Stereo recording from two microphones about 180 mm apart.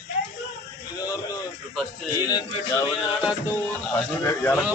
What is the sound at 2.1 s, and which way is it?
Speech, 20° left (ahead or behind).